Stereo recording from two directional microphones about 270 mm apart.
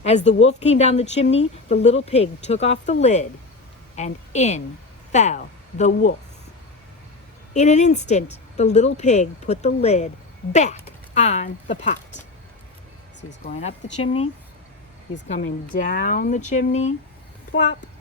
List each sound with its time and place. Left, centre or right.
0.1 s a woman's voice: left
7.5 s a woman's voice: left
13.4 s a woman's voice: left
15.4 s a woman's voice: left